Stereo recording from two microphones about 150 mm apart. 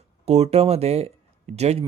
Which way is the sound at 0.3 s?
45° right (ahead or behind).